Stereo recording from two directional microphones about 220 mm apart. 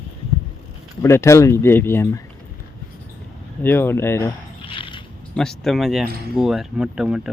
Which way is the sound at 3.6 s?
10° left (ahead or behind).